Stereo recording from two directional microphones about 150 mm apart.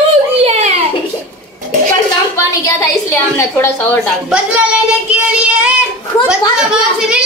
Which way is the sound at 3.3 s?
15° left (ahead or behind).